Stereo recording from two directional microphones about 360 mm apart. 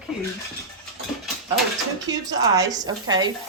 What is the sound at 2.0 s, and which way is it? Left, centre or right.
A woman's voice, centre.